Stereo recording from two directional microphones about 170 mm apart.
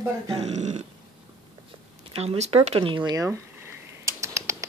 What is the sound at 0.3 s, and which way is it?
Speech, 40° right (ahead or behind).